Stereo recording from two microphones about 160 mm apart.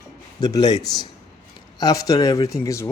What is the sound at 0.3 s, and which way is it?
Speech, 25° left (ahead or behind).